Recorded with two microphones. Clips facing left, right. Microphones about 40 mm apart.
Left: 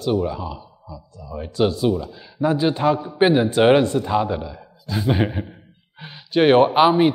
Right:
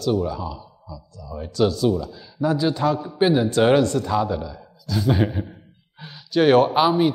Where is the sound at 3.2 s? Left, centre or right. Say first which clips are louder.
Left 2 dB; left.